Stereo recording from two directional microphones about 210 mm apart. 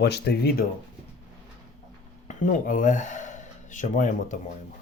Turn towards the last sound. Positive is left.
turn(degrees=35)  # may be behind; listen again after turning